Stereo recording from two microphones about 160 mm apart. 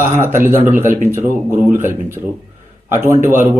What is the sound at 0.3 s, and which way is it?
Speech, 15° right (ahead or behind).